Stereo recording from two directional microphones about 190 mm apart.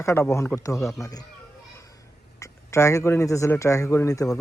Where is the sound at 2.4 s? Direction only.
15° left (ahead or behind).